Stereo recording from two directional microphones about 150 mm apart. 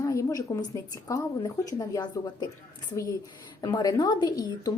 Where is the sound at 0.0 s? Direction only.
20° left (ahead or behind).